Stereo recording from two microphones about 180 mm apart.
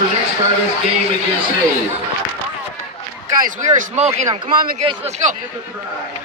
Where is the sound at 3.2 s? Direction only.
45° right (ahead or behind).